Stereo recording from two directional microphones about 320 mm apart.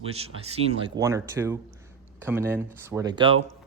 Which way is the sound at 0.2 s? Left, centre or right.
Centre.